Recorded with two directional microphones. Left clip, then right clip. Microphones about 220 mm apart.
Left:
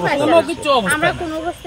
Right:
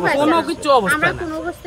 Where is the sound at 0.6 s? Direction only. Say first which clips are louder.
Right 1 dB; 15° right (ahead or behind).